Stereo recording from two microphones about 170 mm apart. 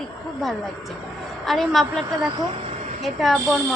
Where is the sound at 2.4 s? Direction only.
35° right (ahead or behind).